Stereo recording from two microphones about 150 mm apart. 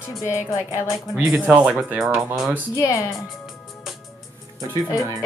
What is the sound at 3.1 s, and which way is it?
Music, centre (ahead or behind).